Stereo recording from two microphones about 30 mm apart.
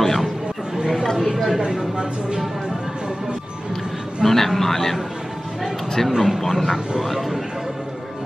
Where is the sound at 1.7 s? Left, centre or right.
Right.